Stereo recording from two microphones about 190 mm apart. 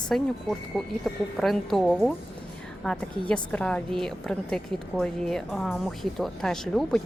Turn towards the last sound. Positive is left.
turn(degrees=5)  # may be behind; listen again after turning